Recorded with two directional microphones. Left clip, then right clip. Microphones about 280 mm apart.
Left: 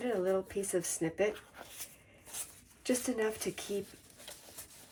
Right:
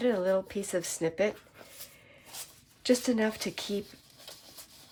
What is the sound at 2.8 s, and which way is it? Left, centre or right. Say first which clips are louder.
Speech: right 6 dB; right.